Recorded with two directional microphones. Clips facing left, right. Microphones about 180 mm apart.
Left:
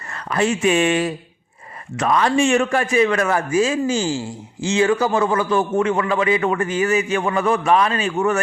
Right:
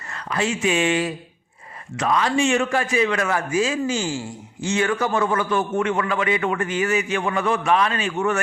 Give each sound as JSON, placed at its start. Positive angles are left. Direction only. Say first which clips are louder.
{"t": 0.1, "sound": "a man's voice", "louder": "left 4 dB", "side_deg": 50}